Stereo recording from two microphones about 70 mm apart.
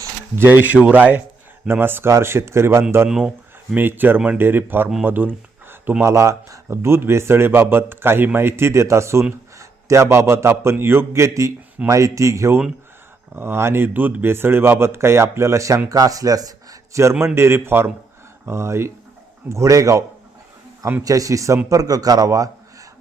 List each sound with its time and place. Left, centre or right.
0.3 s speech: right
3.8 s speech: right
6.0 s speech: right
13.3 s speech: right
15.9 s speech: right
17.0 s speech: right
21.7 s a man's voice: right